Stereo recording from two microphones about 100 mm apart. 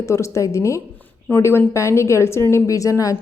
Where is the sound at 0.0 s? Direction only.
30° left (ahead or behind).